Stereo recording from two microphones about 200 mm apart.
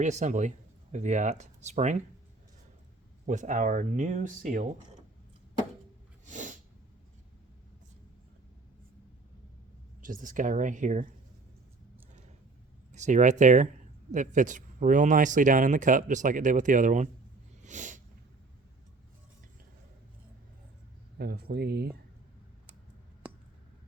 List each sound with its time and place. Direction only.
0.0 s speech: 35° right (ahead or behind)
3.2 s speech: 40° right (ahead or behind)
6.2 s sneeze: 40° right (ahead or behind)
10.0 s speech: 40° right (ahead or behind)
12.9 s speech: 35° right (ahead or behind)
17.6 s a sound: 40° right (ahead or behind)
21.2 s speech: 50° right (ahead or behind)